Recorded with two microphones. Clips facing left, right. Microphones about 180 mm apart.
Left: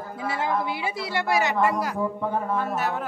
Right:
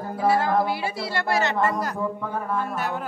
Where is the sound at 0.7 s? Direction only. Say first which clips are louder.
Right 1 dB; 15° left (ahead or behind).